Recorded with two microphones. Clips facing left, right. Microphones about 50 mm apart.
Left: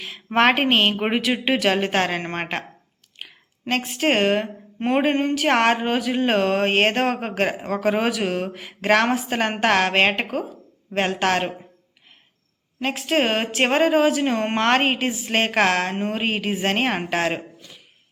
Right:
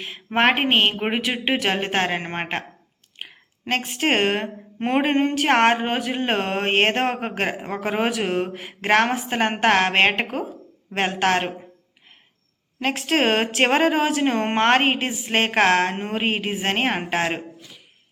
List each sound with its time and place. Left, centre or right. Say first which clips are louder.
0.3 s speech: left 1 dB; right
0.9 s speech: left 2 dB; centre
1.2 s speech: left 2 dB; centre
3.2 s a woman's voice: right 2 dB; right
12.8 s a woman's voice: right 1 dB; right